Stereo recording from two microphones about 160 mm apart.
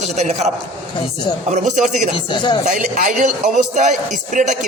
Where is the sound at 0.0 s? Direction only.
45° right (ahead or behind).